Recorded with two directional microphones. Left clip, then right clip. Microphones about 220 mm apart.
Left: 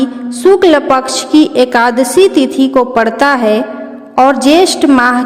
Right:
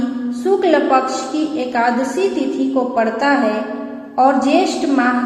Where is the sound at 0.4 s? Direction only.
50° left (ahead or behind).